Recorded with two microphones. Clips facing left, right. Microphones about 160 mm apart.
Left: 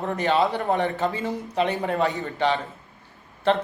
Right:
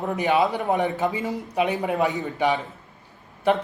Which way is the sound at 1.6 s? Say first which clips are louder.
Right 1 dB; 10° right (ahead or behind).